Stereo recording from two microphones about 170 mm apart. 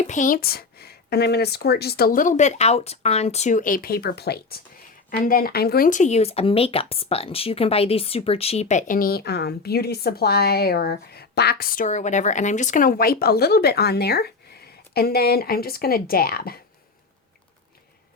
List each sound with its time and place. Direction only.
0.0 s speech: 45° left (ahead or behind); by 4.6 s 70° left (ahead or behind)
5.2 s speech: 55° left (ahead or behind)